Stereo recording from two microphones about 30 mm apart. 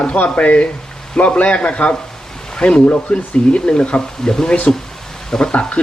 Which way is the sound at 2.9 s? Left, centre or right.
Left.